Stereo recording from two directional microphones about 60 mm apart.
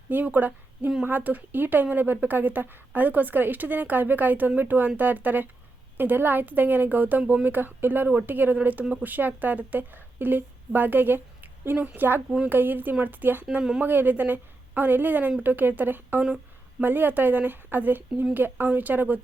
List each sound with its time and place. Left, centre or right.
0.1 s a woman's voice: right
13.6 s speech: centre
13.8 s a woman's voice: right